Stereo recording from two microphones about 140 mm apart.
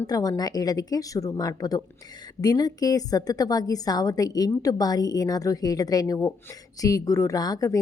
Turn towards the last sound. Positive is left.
turn(degrees=25)  # may be behind; listen again after turning